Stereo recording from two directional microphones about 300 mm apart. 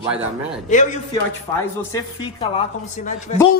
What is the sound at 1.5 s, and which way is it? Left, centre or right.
Speech, centre.